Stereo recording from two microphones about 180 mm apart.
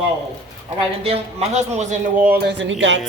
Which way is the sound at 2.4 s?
75° right (ahead or behind).